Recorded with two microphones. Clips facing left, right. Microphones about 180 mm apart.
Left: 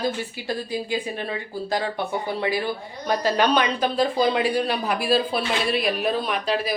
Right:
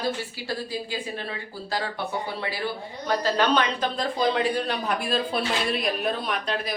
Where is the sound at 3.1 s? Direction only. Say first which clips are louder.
Left 2 dB; 15° left (ahead or behind).